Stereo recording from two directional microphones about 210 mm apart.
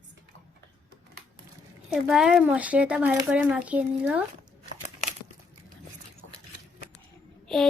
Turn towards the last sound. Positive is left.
turn(degrees=0)  # may be behind; listen again after turning